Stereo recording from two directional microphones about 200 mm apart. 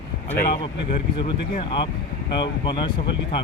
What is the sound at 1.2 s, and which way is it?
Speech, 25° left (ahead or behind).